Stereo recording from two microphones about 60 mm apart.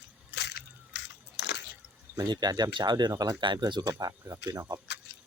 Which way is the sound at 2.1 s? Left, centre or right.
Right.